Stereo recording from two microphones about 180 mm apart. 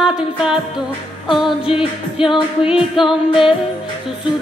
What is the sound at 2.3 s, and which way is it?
Music, 30° left (ahead or behind).